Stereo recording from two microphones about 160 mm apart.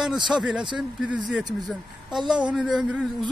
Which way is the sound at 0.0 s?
5° right (ahead or behind).